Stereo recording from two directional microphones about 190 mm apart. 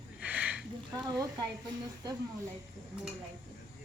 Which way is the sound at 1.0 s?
20° right (ahead or behind).